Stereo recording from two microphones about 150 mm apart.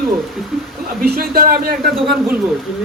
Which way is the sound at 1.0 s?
85° right.